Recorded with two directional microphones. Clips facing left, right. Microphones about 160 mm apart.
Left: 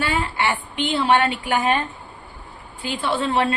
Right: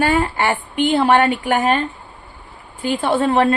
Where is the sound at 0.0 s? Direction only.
45° right (ahead or behind).